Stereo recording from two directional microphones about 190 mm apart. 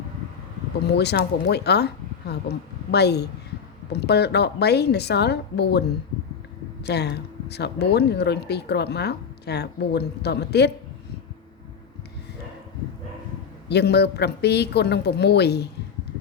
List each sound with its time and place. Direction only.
0.9 s speech: 60° left (ahead or behind)
6.8 s speech: 60° left (ahead or behind)
13.7 s speech: 60° left (ahead or behind)